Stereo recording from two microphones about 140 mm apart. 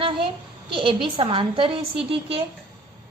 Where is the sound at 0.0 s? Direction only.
35° right (ahead or behind).